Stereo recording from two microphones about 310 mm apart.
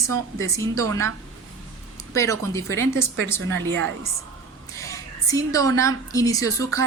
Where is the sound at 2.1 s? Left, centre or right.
Centre.